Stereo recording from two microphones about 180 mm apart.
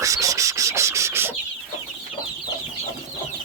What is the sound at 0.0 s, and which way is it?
Sanding, 20° right (ahead or behind).